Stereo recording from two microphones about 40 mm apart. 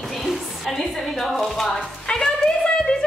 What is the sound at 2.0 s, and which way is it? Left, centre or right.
Music, centre.